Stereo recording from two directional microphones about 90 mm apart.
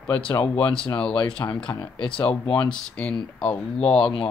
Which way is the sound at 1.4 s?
35° left (ahead or behind).